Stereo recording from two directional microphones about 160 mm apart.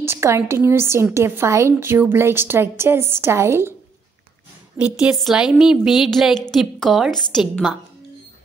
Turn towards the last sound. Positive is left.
turn(degrees=0)  # may be behind; listen again after turning